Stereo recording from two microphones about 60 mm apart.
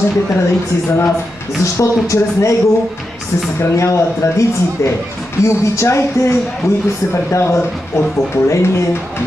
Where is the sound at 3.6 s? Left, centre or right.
Left.